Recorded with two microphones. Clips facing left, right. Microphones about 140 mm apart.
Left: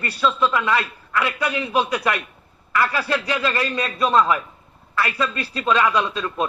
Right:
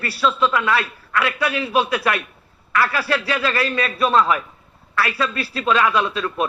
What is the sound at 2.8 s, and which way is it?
Speech, 20° left (ahead or behind).